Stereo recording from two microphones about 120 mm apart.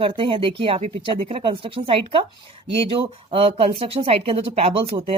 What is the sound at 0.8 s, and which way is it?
Speech, 60° right (ahead or behind).